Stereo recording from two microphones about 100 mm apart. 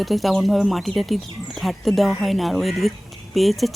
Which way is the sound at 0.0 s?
Centre (ahead or behind).